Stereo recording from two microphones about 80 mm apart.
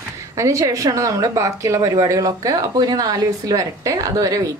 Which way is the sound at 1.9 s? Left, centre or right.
Right.